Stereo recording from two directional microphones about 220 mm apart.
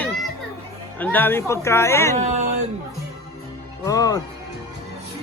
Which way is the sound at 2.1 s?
30° right (ahead or behind).